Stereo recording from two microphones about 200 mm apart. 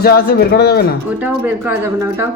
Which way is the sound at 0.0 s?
50° left (ahead or behind).